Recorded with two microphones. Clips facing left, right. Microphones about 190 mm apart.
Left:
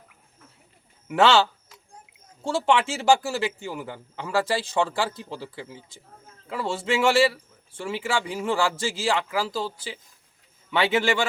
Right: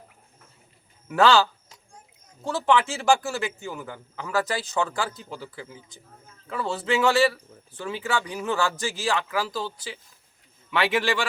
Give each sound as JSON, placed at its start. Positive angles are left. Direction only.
{"t": 1.0, "sound": "a man's voice", "side_deg": 25}
{"t": 6.5, "sound": "a man's voice", "side_deg": 30}